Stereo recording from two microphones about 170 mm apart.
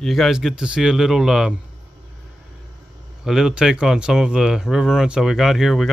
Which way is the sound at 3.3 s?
Centre (ahead or behind).